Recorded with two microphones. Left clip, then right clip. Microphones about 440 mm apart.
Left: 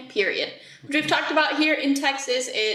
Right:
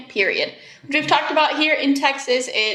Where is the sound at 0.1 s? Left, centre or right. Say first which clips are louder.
Right 4 dB; right.